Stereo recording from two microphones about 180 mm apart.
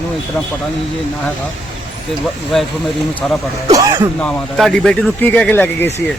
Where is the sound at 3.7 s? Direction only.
20° right (ahead or behind).